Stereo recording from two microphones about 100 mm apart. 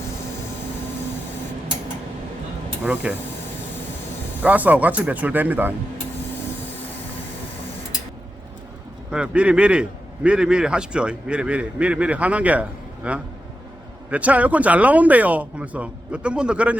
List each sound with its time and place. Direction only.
2.8 s speech: 15° right (ahead or behind)
4.4 s speech: 15° right (ahead or behind)
9.0 s speech: 10° right (ahead or behind)